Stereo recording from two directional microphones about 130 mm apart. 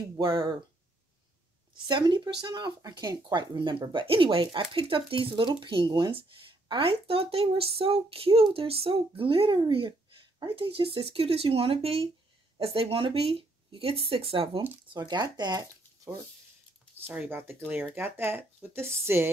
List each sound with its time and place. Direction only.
0.2 s speech: 35° right (ahead or behind)
1.9 s speech: 35° right (ahead or behind)
6.1 s speech: 45° right (ahead or behind); by 16.2 s 25° right (ahead or behind)
17.3 s speech: 15° right (ahead or behind)